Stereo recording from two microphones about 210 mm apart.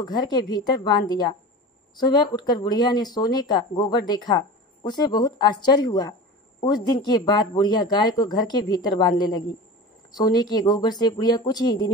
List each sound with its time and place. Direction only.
0.0 s speech: 20° left (ahead or behind)